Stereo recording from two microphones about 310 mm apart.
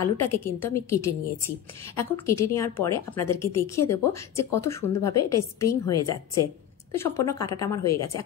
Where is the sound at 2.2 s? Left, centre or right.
Centre.